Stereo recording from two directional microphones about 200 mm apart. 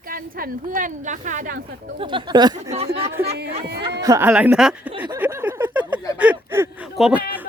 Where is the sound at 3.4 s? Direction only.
55° right (ahead or behind).